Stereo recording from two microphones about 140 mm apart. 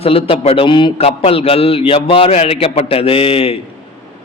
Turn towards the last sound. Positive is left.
turn(degrees=40)  # may be behind; listen again after turning